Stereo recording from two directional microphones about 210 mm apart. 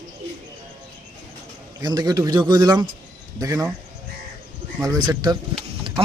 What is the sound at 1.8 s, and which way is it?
A man's voice, 20° right (ahead or behind).